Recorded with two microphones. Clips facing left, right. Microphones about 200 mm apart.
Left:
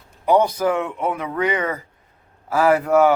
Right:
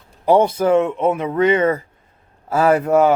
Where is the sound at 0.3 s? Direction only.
25° right (ahead or behind).